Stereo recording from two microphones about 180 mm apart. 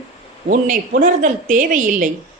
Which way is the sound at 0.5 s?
45° right (ahead or behind).